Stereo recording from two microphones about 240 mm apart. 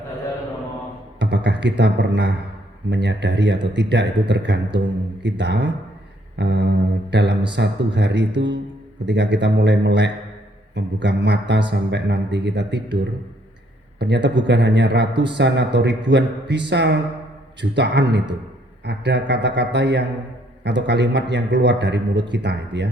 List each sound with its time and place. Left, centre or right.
1.2 s a man's voice: right
14.0 s a man's voice: right
15.1 s speech: centre
15.4 s a man's voice: right